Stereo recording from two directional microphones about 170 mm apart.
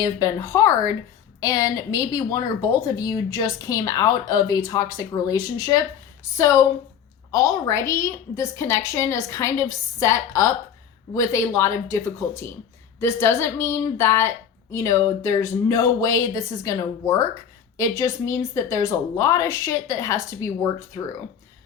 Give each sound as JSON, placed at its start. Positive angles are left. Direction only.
{"t": 0.0, "sound": "a woman's voice", "side_deg": 20}
{"t": 7.3, "sound": "a woman's voice", "side_deg": 20}